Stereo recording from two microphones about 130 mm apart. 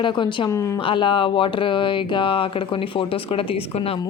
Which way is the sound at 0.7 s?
40° left (ahead or behind).